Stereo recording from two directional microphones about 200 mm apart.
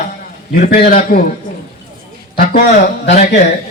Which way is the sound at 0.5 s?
40° left (ahead or behind).